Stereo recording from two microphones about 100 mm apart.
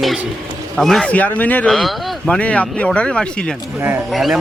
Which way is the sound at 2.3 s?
10° left (ahead or behind).